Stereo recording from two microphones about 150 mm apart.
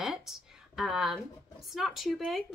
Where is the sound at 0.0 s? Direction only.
Centre (ahead or behind).